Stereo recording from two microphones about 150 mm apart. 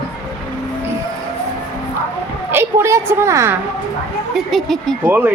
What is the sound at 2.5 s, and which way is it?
A woman's voice, 15° right (ahead or behind).